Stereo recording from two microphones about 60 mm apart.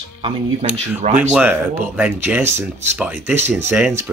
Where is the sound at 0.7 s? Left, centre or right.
Centre.